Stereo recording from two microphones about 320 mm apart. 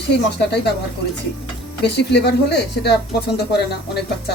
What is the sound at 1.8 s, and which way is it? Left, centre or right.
Speech, left.